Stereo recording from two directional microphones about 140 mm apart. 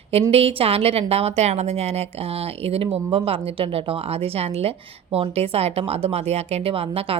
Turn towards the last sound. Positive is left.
turn(degrees=-45)  # may be behind; listen again after turning